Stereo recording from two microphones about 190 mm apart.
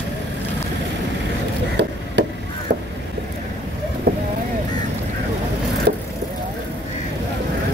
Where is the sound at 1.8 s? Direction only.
60° right (ahead or behind).